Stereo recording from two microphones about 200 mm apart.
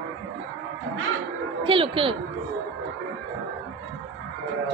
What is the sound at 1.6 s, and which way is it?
Speech, 25° right (ahead or behind).